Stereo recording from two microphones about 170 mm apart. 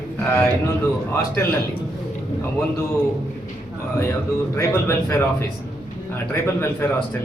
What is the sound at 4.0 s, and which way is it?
Speech, 15° left (ahead or behind).